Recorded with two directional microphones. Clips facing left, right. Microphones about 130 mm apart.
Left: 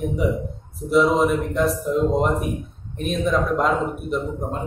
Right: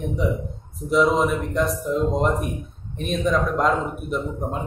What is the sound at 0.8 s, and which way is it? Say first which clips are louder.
A man's voice: left 1 dB; centre (ahead or behind).